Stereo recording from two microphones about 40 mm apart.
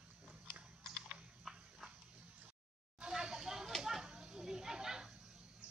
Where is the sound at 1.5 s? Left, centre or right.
Centre.